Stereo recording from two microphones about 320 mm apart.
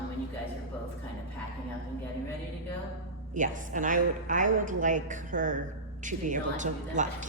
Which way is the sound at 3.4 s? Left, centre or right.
Right.